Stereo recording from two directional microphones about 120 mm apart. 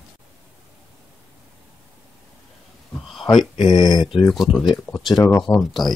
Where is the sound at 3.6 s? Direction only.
35° left (ahead or behind).